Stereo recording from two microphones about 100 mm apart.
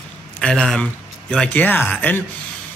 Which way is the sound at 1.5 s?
20° left (ahead or behind).